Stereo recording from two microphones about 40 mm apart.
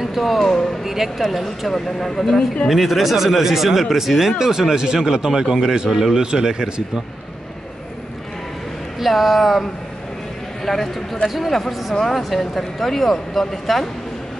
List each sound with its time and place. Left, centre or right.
0.0 s speech: centre
1.7 s speech: centre
2.7 s speech: centre
9.0 s speech: centre
10.6 s speech: centre